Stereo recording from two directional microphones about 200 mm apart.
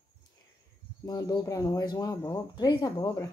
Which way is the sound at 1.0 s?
20° left (ahead or behind).